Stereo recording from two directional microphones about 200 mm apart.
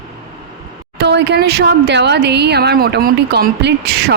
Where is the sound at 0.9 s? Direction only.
60° right (ahead or behind).